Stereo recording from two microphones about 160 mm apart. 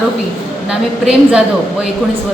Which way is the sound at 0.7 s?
5° right (ahead or behind).